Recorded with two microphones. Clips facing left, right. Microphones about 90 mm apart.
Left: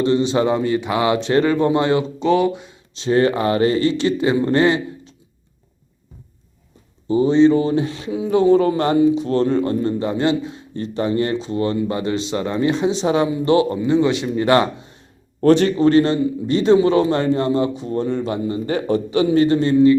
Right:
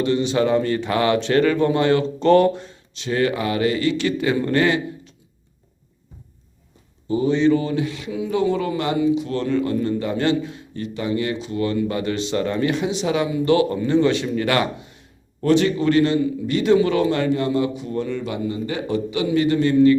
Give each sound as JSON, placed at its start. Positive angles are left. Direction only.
{"t": 0.0, "sound": "a man's voice", "side_deg": 25}
{"t": 2.1, "sound": "speech", "side_deg": 5}
{"t": 2.9, "sound": "a man's voice", "side_deg": 30}
{"t": 7.1, "sound": "a man's voice", "side_deg": 30}
{"t": 13.7, "sound": "a man's voice", "side_deg": 15}